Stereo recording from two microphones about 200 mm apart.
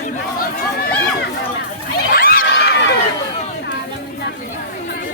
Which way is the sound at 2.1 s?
45° left (ahead or behind).